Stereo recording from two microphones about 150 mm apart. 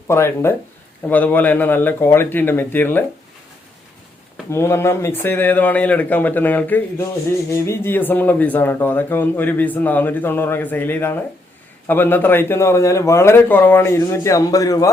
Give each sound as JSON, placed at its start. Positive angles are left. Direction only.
{"t": 0.1, "sound": "speech", "side_deg": 15}
{"t": 4.5, "sound": "speech", "side_deg": 15}